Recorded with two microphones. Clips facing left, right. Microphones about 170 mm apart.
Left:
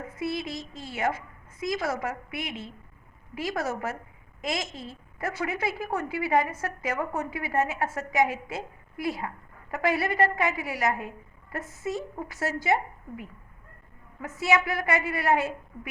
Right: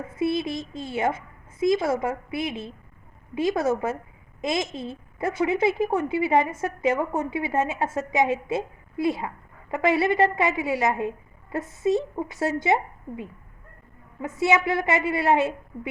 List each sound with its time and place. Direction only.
0.2 s a woman's voice: 25° right (ahead or behind)